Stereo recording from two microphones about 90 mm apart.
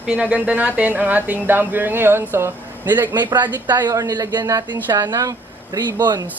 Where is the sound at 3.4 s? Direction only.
50° right (ahead or behind).